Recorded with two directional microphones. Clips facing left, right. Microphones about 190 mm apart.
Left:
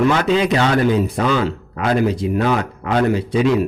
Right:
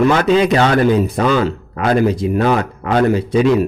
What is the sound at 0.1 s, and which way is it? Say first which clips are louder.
Speech: right 3 dB; 45° right (ahead or behind).